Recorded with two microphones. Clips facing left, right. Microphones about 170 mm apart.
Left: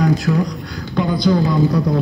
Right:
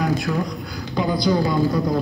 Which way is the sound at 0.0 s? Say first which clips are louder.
Left 5 dB; centre (ahead or behind).